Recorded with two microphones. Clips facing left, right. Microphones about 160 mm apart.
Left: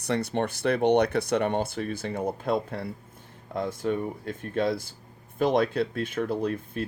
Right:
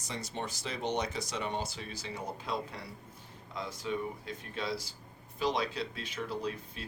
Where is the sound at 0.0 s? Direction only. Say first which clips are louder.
Left 12 dB; 60° left (ahead or behind).